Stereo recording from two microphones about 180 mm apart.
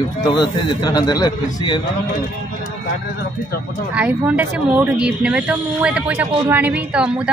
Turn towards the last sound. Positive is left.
turn(degrees=-5)  # may be behind; listen again after turning